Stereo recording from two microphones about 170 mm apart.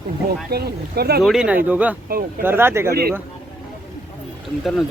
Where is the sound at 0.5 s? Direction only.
70° right (ahead or behind).